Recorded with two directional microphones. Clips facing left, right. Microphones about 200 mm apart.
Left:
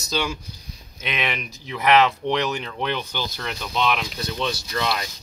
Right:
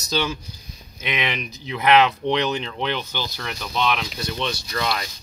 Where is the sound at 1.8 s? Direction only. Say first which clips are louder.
Right 1 dB; centre (ahead or behind).